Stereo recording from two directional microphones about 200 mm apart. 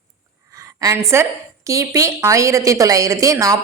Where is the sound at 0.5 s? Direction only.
15° right (ahead or behind).